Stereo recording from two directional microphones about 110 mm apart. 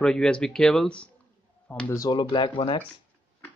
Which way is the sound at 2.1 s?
50° left (ahead or behind).